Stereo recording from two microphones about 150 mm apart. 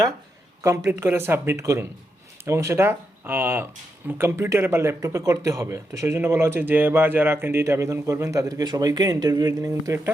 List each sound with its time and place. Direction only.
0.6 s speech: 20° right (ahead or behind)